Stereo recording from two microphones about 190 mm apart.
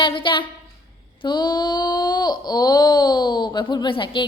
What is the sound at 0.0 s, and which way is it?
Speech, 25° left (ahead or behind).